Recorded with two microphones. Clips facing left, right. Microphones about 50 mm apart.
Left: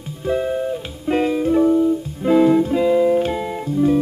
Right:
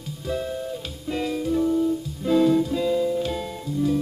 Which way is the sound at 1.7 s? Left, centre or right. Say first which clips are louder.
Left 6 dB; left.